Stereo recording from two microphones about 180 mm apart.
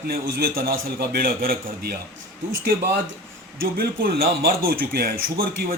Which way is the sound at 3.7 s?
55° right (ahead or behind).